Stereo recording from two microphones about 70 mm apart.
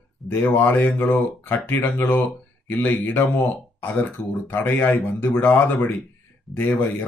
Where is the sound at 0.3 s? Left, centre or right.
Left.